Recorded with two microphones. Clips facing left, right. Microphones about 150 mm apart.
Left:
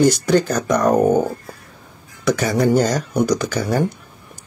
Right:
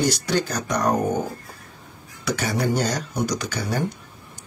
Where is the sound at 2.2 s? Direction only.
45° left (ahead or behind).